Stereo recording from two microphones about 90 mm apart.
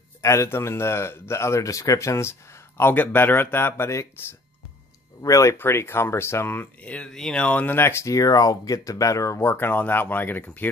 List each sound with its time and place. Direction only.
0.2 s speech: 35° left (ahead or behind)
5.2 s speech: 40° left (ahead or behind)
5.6 s speech: 25° left (ahead or behind)